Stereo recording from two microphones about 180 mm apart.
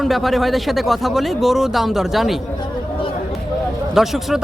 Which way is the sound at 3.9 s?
Centre (ahead or behind).